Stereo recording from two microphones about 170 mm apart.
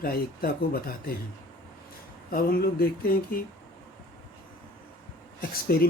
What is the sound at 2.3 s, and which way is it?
Speech, 60° left (ahead or behind).